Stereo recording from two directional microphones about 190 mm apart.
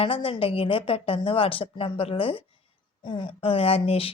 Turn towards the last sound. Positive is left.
turn(degrees=30)  # may be behind; listen again after turning